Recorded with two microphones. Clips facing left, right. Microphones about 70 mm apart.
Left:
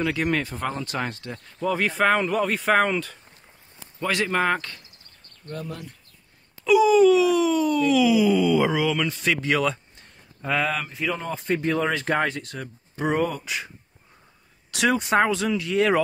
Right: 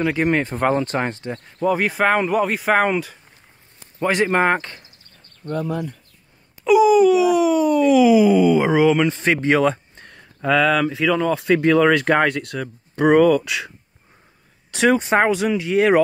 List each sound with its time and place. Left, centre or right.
0.0 s speech: right
0.6 s speech: right
0.8 s speech: right
1.4 s speech: centre
4.0 s speech: right
6.6 s speech: right
10.0 s speech: right
14.7 s speech: right